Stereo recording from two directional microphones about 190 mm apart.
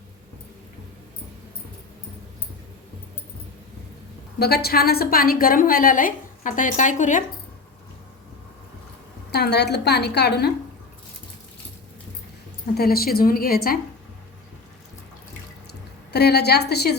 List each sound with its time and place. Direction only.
4.4 s a woman's voice: 55° left (ahead or behind)
9.3 s a woman's voice: 60° left (ahead or behind)
12.7 s a woman's voice: 55° left (ahead or behind)
16.1 s a woman's voice: 60° left (ahead or behind)